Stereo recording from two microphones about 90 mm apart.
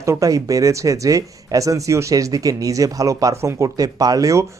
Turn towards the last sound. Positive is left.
turn(degrees=-40)  # may be behind; listen again after turning